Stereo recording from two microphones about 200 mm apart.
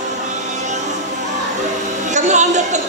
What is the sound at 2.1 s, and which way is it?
Speech, 35° right (ahead or behind).